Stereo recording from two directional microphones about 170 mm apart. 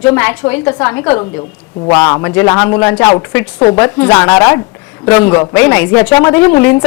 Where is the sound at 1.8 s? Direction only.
25° left (ahead or behind).